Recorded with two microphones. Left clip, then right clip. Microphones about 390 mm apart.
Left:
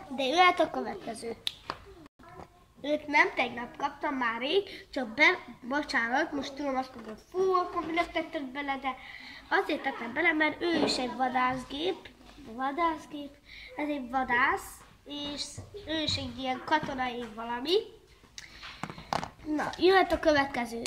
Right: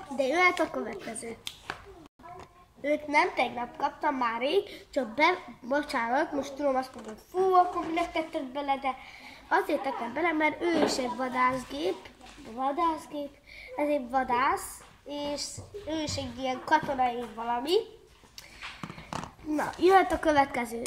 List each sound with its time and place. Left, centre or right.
0.2 s a woman's voice: centre
2.8 s a woman's voice: centre
18.8 s a sound: centre
19.5 s a woman's voice: centre